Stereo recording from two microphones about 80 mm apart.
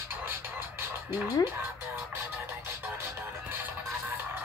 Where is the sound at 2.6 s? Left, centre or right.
Right.